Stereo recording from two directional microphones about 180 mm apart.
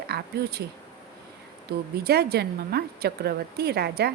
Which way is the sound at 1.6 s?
60° right (ahead or behind).